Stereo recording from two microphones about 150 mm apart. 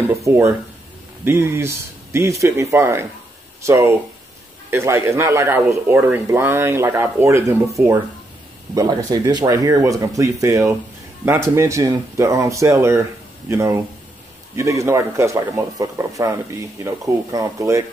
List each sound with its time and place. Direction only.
0.1 s speech: 20° right (ahead or behind)